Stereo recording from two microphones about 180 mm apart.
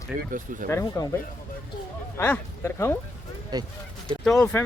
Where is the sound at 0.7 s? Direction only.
15° left (ahead or behind).